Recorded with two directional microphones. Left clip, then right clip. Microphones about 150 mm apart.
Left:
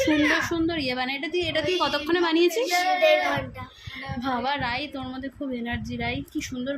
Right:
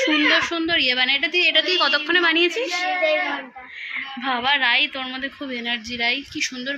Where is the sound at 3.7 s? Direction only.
25° left (ahead or behind).